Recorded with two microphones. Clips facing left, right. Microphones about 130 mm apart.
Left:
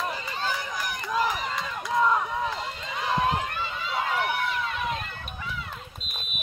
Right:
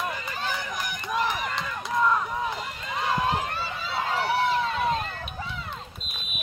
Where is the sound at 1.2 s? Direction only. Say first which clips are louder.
Left 1 dB; 25° left (ahead or behind).